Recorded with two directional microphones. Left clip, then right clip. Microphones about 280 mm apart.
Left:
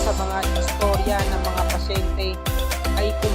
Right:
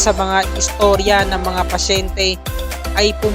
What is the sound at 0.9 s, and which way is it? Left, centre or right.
Speech, right.